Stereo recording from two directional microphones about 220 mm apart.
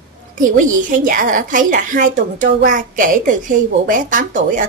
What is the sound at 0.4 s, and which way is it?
A woman's voice, 35° right (ahead or behind).